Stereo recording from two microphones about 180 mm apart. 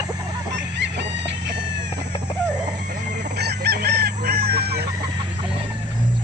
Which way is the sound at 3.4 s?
65° right (ahead or behind).